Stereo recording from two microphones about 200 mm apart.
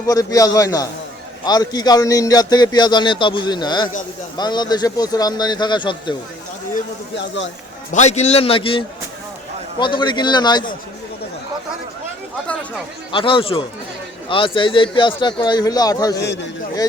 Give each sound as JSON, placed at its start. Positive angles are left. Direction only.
{"t": 0.1, "sound": "a man's voice", "side_deg": 15}
{"t": 7.9, "sound": "a man's voice", "side_deg": 35}
{"t": 13.1, "sound": "a man's voice", "side_deg": 25}